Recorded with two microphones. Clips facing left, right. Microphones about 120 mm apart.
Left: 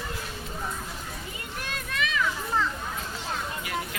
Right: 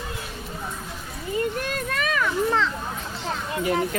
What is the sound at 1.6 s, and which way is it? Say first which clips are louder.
Speech: right 5 dB; 45° right (ahead or behind).